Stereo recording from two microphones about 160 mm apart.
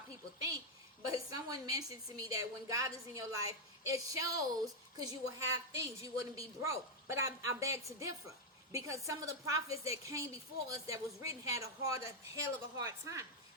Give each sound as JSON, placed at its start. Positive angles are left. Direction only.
{"t": 1.3, "sound": "a woman's voice", "side_deg": -25}